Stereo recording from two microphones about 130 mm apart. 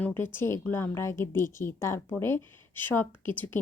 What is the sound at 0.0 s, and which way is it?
A woman's voice, 15° left (ahead or behind).